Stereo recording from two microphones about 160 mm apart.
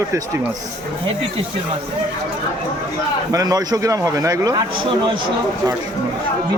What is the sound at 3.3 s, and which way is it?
A man's voice, 20° right (ahead or behind).